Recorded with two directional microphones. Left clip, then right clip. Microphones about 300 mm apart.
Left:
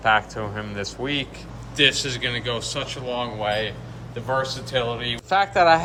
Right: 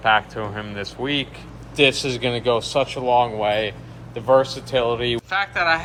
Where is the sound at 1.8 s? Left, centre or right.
Centre.